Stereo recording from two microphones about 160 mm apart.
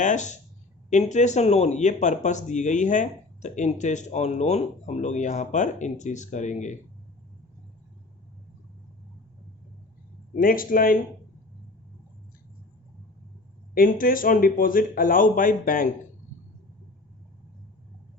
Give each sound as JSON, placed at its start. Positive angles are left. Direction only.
{"t": 0.0, "sound": "speech", "side_deg": 50}
{"t": 10.3, "sound": "speech", "side_deg": 60}
{"t": 13.7, "sound": "speech", "side_deg": 60}